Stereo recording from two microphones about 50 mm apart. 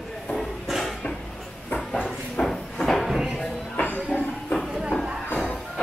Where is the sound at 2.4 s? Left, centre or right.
Centre.